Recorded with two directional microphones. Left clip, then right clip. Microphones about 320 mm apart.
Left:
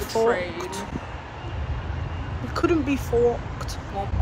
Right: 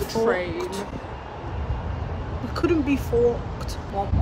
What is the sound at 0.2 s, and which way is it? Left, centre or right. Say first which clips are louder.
Speech: left 1 dB; centre.